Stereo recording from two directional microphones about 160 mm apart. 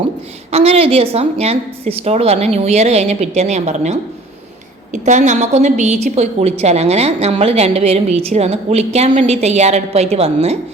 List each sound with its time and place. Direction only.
0.5 s a woman's voice: 40° right (ahead or behind)